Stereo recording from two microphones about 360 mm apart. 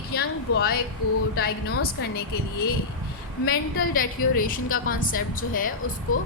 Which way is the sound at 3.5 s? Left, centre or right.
Left.